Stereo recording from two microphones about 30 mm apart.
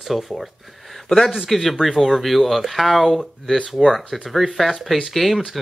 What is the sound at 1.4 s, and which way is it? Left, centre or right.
Speech, centre.